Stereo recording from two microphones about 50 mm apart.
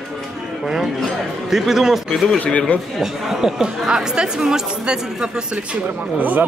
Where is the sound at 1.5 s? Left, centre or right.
Centre.